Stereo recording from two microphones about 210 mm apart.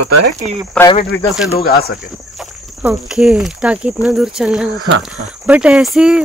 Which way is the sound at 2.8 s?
5° right (ahead or behind).